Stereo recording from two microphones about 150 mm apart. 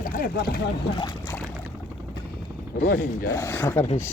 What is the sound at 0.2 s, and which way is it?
Speech, 85° left.